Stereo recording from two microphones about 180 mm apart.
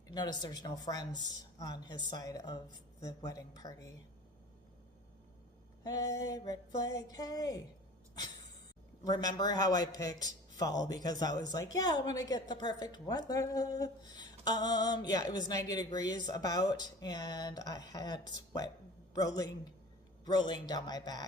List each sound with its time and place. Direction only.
0.1 s a man's voice: 20° left (ahead or behind)
5.8 s a man's voice: 20° left (ahead or behind)
9.0 s a man's voice: 20° left (ahead or behind)